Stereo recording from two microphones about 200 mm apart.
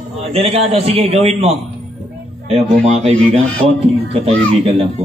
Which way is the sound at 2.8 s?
30° right (ahead or behind).